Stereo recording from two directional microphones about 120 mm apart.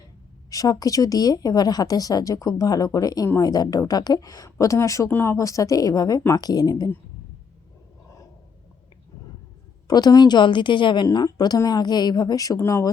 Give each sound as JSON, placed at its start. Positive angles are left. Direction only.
{"t": 0.5, "sound": "a woman's voice", "side_deg": 30}
{"t": 9.8, "sound": "a woman's voice", "side_deg": 35}